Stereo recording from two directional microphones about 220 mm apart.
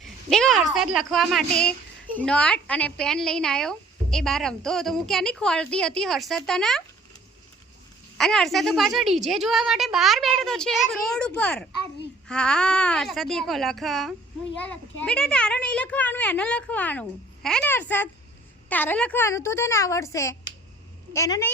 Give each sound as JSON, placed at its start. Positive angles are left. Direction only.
{"t": 0.0, "sound": "a woman's voice", "side_deg": 0}
{"t": 8.2, "sound": "a woman's voice", "side_deg": 0}